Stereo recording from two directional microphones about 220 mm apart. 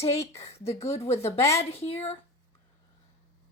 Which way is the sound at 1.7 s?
25° left (ahead or behind).